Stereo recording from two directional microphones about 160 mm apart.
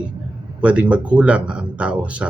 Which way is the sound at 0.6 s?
10° right (ahead or behind).